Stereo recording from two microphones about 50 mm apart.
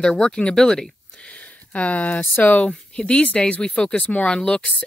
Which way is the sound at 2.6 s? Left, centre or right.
Centre.